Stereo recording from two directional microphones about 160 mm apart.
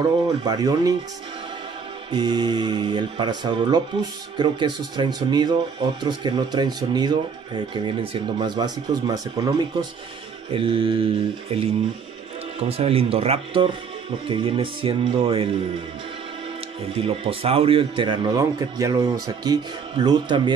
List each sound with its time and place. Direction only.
0.4 s speech: 25° right (ahead or behind)
2.0 s speech: 30° right (ahead or behind)
16.9 s speech: 35° right (ahead or behind)